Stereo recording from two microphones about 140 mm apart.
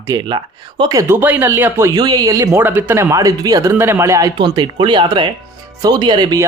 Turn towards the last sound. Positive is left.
turn(degrees=-30)  # may be behind; listen again after turning